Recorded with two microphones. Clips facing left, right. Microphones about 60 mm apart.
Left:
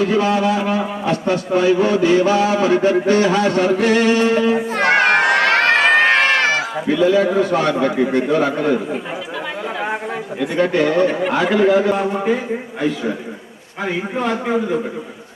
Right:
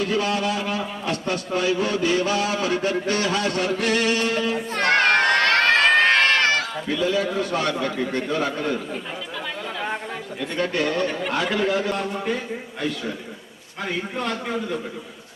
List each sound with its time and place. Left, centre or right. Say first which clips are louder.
0.0 s a man's voice: left 7 dB; centre
4.5 s crowd: left 5 dB; centre
10.4 s a man's voice: left 7 dB; centre
13.8 s a man's voice: left 6 dB; centre